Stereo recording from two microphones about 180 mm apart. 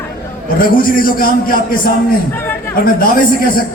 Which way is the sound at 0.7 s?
50° left (ahead or behind).